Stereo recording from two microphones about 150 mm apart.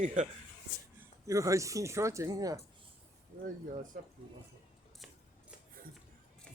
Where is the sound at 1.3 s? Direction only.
20° right (ahead or behind).